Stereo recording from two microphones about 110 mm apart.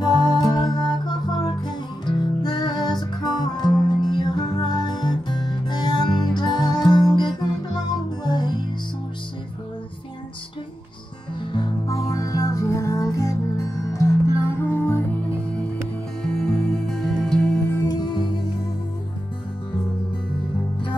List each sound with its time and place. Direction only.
0.0 s music: 40° left (ahead or behind)
11.5 s music: 30° left (ahead or behind)
16.2 s music: 5° left (ahead or behind)
17.6 s music: 25° left (ahead or behind)
17.9 s music: 45° left (ahead or behind)